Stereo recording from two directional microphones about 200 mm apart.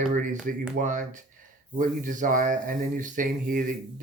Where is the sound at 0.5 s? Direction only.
45° right (ahead or behind).